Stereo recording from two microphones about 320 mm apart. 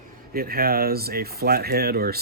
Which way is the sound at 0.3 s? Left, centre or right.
Right.